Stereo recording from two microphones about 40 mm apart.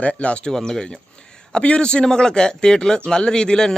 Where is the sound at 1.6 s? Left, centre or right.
Left.